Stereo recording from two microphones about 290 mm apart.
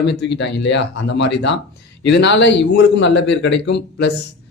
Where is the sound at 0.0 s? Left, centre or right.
Left.